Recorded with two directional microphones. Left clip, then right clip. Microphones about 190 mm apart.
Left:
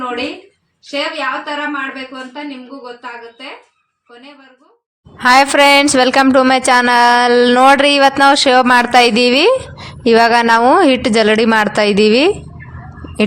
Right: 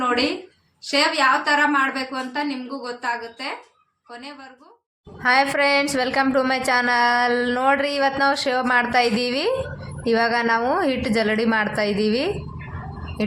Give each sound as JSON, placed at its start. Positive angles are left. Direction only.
{"t": 0.9, "sound": "a woman's voice", "side_deg": -15}
{"t": 5.2, "sound": "a woman's voice", "side_deg": 45}